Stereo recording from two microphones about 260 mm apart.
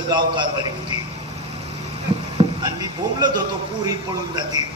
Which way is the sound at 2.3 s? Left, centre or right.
Centre.